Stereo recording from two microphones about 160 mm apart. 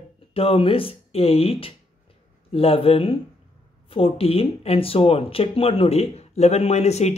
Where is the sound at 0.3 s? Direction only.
35° left (ahead or behind).